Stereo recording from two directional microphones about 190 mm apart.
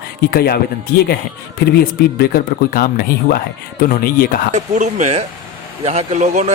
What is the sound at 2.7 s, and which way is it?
Speech, 50° left (ahead or behind).